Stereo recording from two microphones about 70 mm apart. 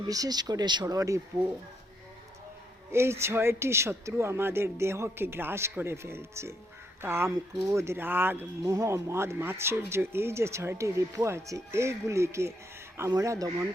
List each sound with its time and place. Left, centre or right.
0.1 s speech: right
0.9 s speech: right
2.9 s speech: right
7.6 s speech: right
7.9 s speech: right
8.6 s speech: right